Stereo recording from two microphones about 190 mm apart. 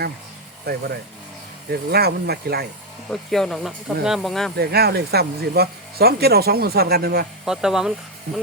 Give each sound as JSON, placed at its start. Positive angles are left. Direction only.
{"t": 1.7, "sound": "speech", "side_deg": -55}
{"t": 3.1, "sound": "speech", "side_deg": 0}
{"t": 4.5, "sound": "speech", "side_deg": -55}
{"t": 7.4, "sound": "speech", "side_deg": -5}